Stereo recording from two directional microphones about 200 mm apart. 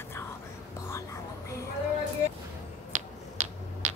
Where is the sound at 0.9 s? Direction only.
15° left (ahead or behind).